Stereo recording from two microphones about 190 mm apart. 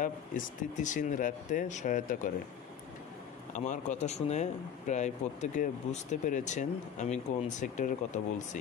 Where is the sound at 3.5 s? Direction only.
40° left (ahead or behind).